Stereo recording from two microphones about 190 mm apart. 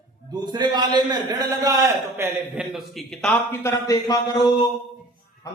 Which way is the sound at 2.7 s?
Centre (ahead or behind).